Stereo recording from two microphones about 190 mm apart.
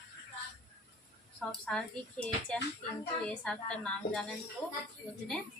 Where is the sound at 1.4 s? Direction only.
5° left (ahead or behind).